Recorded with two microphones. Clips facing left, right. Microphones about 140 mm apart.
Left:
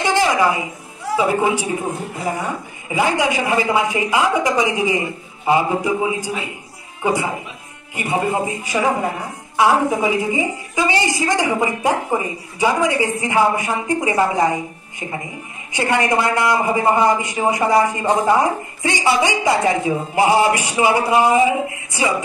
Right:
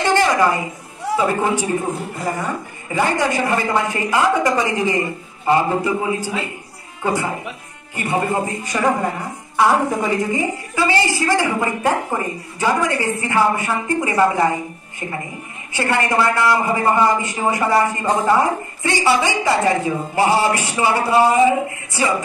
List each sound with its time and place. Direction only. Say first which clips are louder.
0.0 s a sound: right 1 dB; 10° left (ahead or behind)
1.1 s a man's voice: left 1 dB; 10° left (ahead or behind)
2.9 s a man's voice: left 1 dB; 10° left (ahead or behind)
15.7 s a man's voice: left 1 dB; 15° left (ahead or behind)